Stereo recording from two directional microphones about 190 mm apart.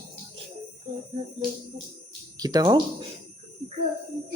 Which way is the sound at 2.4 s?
20° right (ahead or behind).